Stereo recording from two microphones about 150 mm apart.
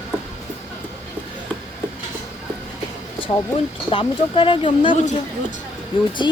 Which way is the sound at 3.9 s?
35° left (ahead or behind).